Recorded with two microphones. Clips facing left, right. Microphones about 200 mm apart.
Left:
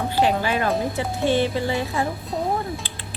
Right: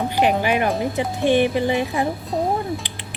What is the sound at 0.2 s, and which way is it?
Speech, 15° right (ahead or behind).